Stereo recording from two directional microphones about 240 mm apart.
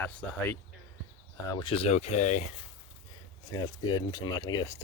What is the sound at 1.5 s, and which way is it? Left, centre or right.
Speech, left.